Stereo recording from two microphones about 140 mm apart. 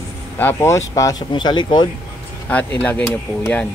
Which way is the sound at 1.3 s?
35° left (ahead or behind).